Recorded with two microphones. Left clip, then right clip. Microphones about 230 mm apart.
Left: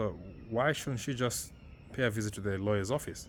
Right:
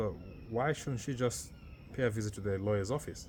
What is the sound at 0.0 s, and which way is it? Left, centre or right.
Speech, left.